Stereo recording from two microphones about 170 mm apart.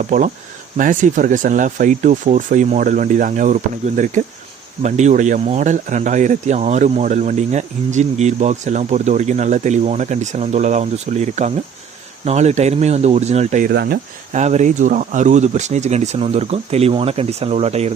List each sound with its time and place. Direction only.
0.0 s speech: 50° right (ahead or behind)
13.7 s speech: 65° right (ahead or behind)
14.3 s speech: 45° right (ahead or behind)